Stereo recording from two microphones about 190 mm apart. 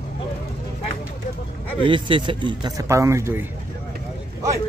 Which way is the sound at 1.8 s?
25° right (ahead or behind).